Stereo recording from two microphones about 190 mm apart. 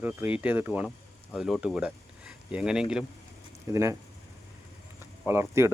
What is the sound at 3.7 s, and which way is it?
Speech, 15° right (ahead or behind).